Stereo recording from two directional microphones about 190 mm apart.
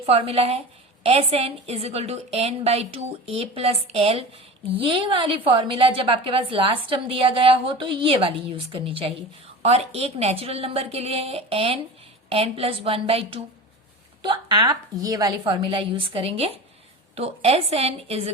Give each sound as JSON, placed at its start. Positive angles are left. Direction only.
{"t": 0.0, "sound": "a woman's voice", "side_deg": -30}